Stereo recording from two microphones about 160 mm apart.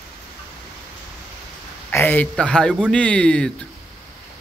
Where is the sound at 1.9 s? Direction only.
10° left (ahead or behind).